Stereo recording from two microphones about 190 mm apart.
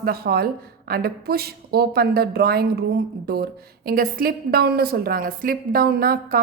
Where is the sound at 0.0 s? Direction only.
55° right (ahead or behind).